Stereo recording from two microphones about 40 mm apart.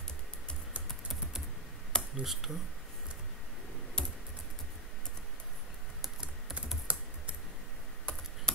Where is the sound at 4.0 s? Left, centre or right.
Left.